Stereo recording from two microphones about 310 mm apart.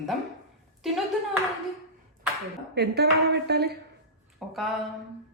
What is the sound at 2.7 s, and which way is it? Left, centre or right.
Speech, right.